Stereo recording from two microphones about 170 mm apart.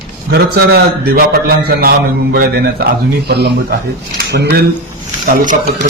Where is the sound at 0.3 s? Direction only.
70° right (ahead or behind).